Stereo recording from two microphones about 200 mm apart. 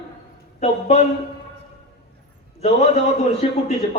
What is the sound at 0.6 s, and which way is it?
Speech, 35° left (ahead or behind).